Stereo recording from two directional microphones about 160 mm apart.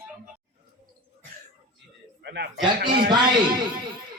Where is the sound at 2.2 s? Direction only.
90° right.